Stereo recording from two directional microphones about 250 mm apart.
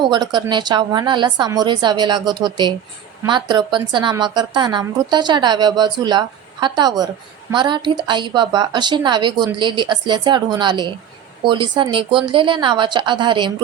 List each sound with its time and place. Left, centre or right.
0.0 s a woman's voice: centre